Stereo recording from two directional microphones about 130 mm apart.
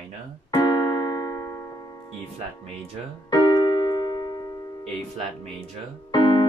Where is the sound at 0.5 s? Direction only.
30° left (ahead or behind).